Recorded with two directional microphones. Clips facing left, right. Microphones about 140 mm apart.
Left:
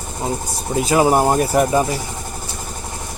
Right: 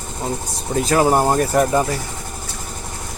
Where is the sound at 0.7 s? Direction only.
5° left (ahead or behind).